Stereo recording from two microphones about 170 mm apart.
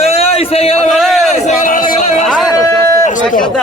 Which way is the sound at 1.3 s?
45° left (ahead or behind).